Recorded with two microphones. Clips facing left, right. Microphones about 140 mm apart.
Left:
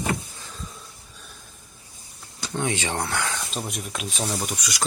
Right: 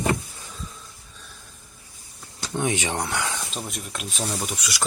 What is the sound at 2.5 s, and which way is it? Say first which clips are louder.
Speech: right 1 dB; 15° right (ahead or behind).